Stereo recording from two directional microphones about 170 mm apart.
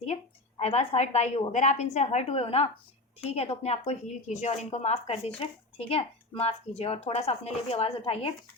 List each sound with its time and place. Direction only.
0.0 s a woman's voice: 40° left (ahead or behind)